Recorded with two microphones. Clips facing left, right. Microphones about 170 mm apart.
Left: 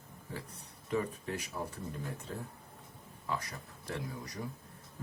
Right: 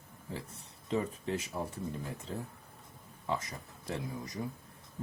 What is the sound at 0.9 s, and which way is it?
Speech, 25° right (ahead or behind).